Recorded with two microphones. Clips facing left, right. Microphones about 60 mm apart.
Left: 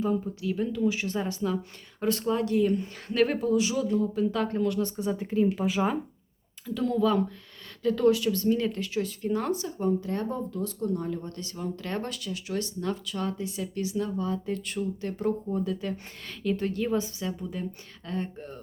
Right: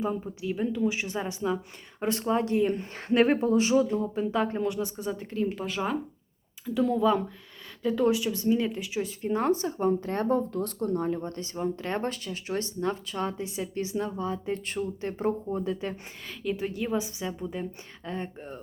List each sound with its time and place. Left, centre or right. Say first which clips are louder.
0.0 s a woman's voice: left 2 dB; centre
4.8 s speech: left 3 dB; centre
6.7 s a woman's voice: right 1 dB; centre
16.4 s a woman's voice: left 2 dB; centre